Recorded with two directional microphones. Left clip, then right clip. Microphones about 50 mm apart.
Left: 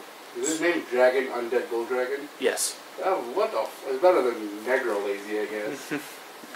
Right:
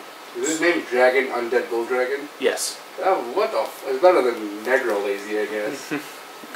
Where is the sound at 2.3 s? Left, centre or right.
Left.